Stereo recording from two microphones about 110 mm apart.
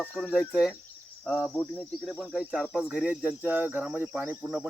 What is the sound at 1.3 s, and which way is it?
Cricket, 10° right (ahead or behind).